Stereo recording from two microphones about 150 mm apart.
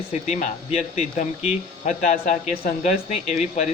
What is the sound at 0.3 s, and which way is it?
Speech, 55° left (ahead or behind).